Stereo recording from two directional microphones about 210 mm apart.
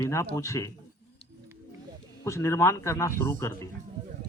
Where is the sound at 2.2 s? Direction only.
15° left (ahead or behind).